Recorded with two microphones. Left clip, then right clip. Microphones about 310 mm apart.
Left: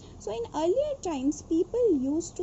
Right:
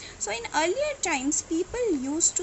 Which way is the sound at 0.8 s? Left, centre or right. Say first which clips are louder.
Right 3 dB; right.